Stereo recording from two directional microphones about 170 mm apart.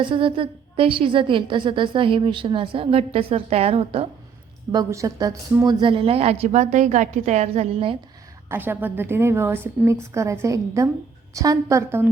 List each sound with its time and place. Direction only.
0.0 s a woman's voice: 30° right (ahead or behind)
4.7 s a woman's voice: 20° right (ahead or behind)
8.4 s a woman's voice: 10° right (ahead or behind)